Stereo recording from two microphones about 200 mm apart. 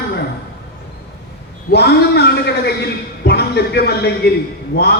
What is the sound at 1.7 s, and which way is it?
A man's voice, 55° left (ahead or behind).